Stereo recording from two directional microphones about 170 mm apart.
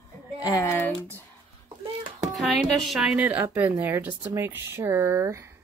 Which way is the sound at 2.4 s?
Centre (ahead or behind).